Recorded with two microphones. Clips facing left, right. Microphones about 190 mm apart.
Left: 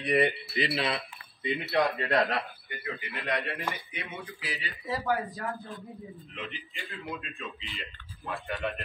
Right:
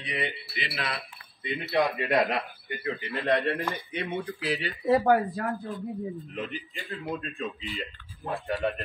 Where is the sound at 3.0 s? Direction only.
35° right (ahead or behind).